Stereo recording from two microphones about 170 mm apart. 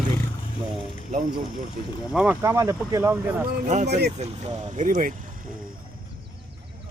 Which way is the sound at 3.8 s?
75° right (ahead or behind).